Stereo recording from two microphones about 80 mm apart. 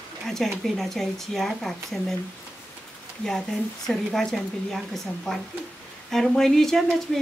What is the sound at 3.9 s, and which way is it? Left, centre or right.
Speech, centre.